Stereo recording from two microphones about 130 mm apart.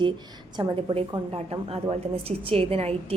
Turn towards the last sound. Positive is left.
turn(degrees=-50)  # may be behind; listen again after turning